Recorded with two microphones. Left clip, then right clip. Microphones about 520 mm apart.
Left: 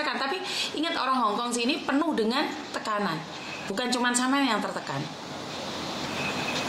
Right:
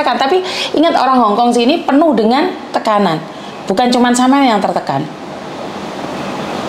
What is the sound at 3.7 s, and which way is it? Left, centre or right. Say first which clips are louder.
Speech: right 16 dB; right.